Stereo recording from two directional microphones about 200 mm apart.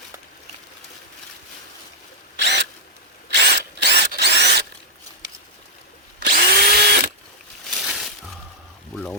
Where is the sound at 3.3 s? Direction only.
55° right (ahead or behind).